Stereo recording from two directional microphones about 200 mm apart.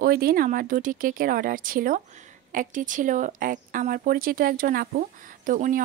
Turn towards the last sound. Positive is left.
turn(degrees=-40)  # may be behind; listen again after turning